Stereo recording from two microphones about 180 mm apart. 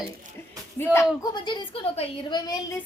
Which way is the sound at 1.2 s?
25° left (ahead or behind).